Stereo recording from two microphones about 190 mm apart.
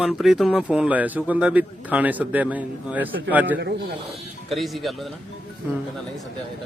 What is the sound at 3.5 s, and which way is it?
Speech, 60° right (ahead or behind).